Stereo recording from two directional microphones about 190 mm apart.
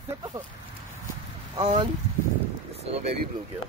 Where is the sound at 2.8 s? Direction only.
30° right (ahead or behind).